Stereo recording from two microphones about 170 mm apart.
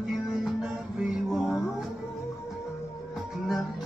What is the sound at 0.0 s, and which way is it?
Music, centre (ahead or behind).